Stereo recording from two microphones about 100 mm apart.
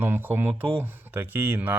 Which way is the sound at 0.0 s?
20° right (ahead or behind).